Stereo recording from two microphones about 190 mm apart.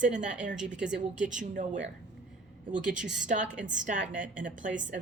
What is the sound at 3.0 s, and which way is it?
A woman's voice, 40° right (ahead or behind).